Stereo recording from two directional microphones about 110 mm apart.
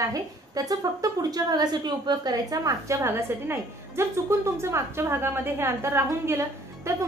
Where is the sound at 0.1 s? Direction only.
35° right (ahead or behind).